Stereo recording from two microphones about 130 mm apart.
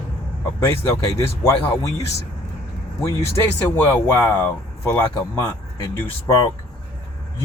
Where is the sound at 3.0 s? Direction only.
20° left (ahead or behind).